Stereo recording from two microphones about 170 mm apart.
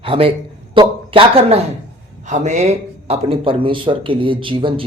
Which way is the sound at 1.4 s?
35° right (ahead or behind).